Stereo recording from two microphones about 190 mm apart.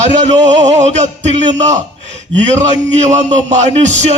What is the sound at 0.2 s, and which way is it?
A man's voice, 35° right (ahead or behind).